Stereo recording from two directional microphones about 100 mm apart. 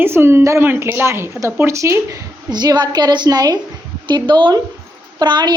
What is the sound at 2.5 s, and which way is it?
A woman's voice, 45° right (ahead or behind).